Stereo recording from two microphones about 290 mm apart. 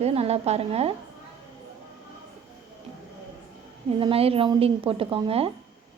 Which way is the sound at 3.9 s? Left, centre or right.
Centre.